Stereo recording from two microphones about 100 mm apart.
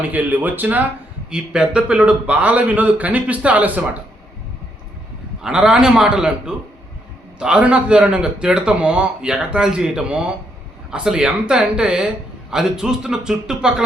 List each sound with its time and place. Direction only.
0.1 s a man's voice: 20° right (ahead or behind)
5.4 s a man's voice: 5° right (ahead or behind)